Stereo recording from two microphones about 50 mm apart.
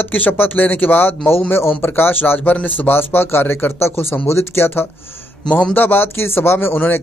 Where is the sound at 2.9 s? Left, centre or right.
Left.